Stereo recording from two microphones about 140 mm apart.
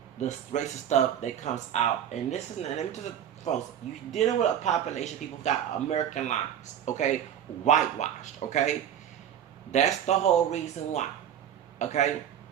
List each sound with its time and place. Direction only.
0.2 s a man's voice: 55° left (ahead or behind)
9.7 s speech: 55° left (ahead or behind)